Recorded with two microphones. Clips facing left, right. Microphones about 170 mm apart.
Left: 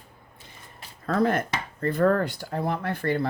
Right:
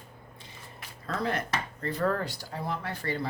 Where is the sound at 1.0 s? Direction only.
50° left (ahead or behind).